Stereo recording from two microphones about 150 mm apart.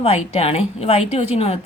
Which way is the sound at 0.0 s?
40° left (ahead or behind).